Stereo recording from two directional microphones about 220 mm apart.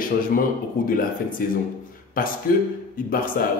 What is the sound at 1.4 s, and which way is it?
A man's voice, 40° left (ahead or behind).